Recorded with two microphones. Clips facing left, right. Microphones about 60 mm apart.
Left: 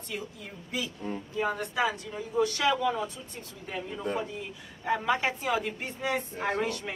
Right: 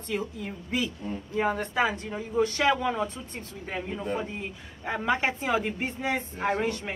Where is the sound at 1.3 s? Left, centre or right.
Right.